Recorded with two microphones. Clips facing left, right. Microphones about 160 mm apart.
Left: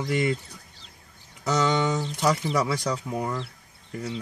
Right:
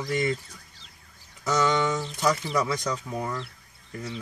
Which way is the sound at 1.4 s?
25° left (ahead or behind).